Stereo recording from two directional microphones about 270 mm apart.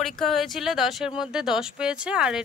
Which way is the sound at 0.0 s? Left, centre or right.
Centre.